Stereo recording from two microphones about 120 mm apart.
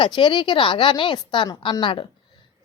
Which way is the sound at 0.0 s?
40° left (ahead or behind).